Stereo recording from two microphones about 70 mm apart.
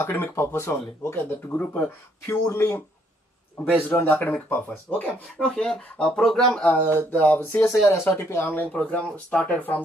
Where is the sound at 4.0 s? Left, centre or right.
Left.